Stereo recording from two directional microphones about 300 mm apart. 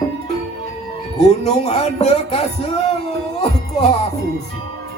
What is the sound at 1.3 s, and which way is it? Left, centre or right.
Speech, left.